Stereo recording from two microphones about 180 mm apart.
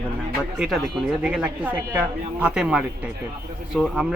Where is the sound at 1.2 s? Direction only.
5° right (ahead or behind).